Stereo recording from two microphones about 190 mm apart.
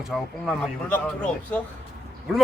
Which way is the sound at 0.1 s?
Centre (ahead or behind).